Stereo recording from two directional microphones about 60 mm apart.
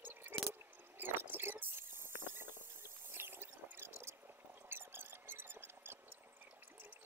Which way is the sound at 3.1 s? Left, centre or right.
Right.